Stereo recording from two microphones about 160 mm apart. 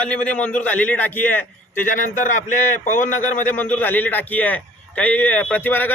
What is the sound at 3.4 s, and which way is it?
A man's voice, 10° left (ahead or behind).